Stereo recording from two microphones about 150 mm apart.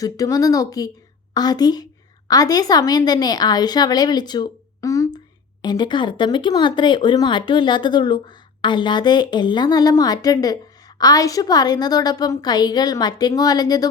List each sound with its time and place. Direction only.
0.0 s a woman's voice: 25° left (ahead or behind)